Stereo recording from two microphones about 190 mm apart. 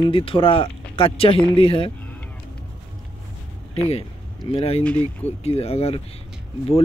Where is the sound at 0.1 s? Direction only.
30° left (ahead or behind).